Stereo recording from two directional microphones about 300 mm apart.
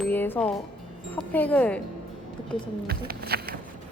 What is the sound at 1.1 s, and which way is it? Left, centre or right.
Speech, centre.